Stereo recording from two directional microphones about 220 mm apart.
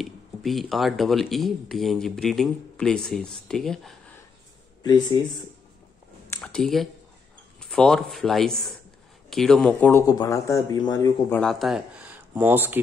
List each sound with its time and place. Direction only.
0.0 s speech: centre (ahead or behind)
4.8 s speech: 20° left (ahead or behind)
6.3 s speech: 5° left (ahead or behind)